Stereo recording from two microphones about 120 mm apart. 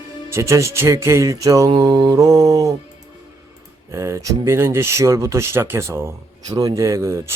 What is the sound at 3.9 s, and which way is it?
Music, 25° right (ahead or behind).